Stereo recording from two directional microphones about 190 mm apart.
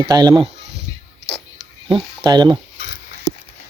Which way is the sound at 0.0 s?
20° right (ahead or behind).